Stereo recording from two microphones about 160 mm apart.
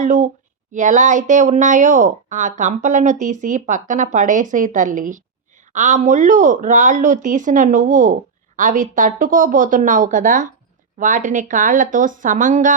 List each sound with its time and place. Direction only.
0.0 s speech: 50° right (ahead or behind)